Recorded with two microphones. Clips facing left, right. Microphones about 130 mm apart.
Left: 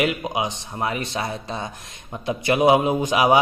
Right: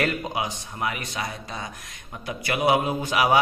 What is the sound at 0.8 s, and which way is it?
Speech, 30° left (ahead or behind).